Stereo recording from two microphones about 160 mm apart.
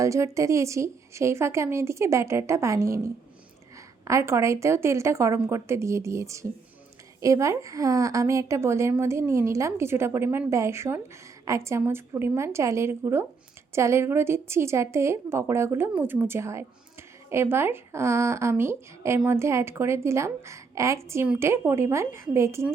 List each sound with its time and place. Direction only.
0.0 s a woman's voice: 20° right (ahead or behind)